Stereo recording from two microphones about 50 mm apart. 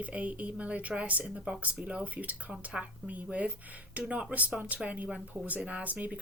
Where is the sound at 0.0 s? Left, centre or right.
Right.